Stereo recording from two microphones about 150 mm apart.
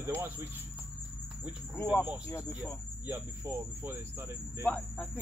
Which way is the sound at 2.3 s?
20° left (ahead or behind).